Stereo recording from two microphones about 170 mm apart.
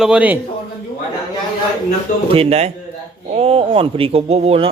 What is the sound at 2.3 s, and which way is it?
Speech, 40° right (ahead or behind).